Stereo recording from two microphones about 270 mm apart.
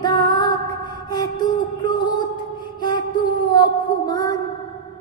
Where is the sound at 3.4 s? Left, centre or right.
Centre.